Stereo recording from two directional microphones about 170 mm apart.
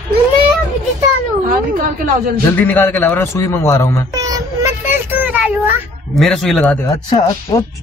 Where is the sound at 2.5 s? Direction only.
10° left (ahead or behind).